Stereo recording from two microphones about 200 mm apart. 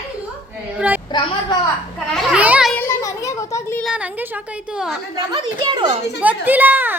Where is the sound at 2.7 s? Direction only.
15° left (ahead or behind).